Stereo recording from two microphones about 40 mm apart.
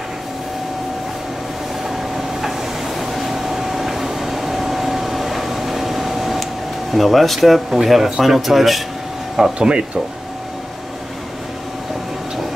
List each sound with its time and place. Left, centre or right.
1.9 s vehicle: centre
6.9 s speech: centre
9.6 s speech: right